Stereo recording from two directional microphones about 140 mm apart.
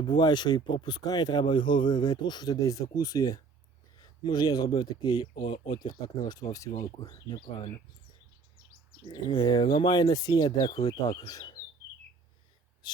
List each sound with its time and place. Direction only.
0.1 s a man's voice: 30° left (ahead or behind)
5.3 s speech: 55° left (ahead or behind)
5.6 s speech: 30° left (ahead or behind)
9.0 s speech: 30° left (ahead or behind)